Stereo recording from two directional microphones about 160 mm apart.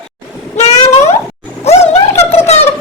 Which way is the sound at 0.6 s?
45° left (ahead or behind).